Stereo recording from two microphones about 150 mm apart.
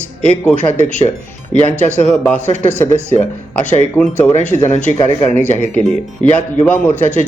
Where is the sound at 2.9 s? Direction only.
50° left (ahead or behind).